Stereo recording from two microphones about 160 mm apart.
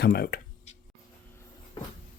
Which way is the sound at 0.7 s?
45° left (ahead or behind).